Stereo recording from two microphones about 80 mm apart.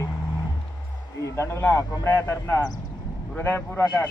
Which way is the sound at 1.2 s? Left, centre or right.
Left.